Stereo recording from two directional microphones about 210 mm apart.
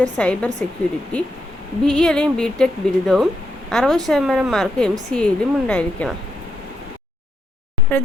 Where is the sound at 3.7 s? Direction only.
Centre (ahead or behind).